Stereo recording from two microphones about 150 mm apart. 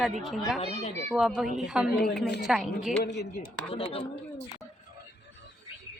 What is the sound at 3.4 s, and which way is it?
Speech, 40° left (ahead or behind).